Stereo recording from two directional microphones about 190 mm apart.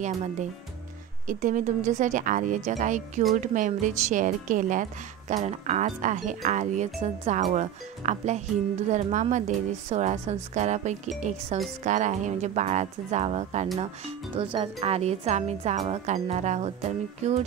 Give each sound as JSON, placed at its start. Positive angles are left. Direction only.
{"t": 0.0, "sound": "speech", "side_deg": -40}